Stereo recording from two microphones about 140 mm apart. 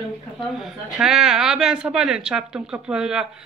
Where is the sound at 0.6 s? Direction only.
5° right (ahead or behind).